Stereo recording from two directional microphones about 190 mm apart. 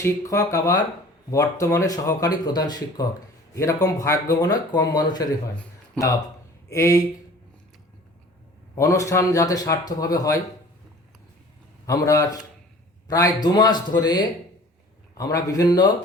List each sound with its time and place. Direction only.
0.0 s a man's voice: 15° left (ahead or behind)
8.7 s a man's voice: 15° left (ahead or behind)
11.9 s a man's voice: 15° left (ahead or behind)